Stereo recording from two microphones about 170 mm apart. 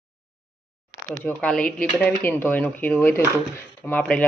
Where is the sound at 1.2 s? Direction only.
5° left (ahead or behind).